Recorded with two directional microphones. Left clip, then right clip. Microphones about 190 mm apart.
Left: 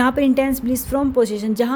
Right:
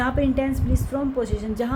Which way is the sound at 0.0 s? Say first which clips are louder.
Left 6 dB; 60° left (ahead or behind).